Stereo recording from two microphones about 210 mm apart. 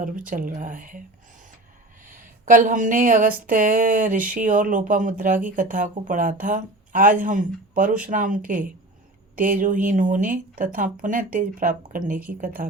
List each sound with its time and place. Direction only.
0.0 s speech: 40° right (ahead or behind)
2.0 s speech: 40° right (ahead or behind)